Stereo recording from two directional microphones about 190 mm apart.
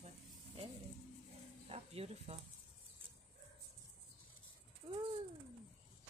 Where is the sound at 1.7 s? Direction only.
30° right (ahead or behind).